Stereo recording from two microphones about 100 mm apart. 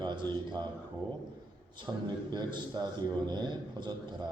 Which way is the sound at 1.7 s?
50° right (ahead or behind).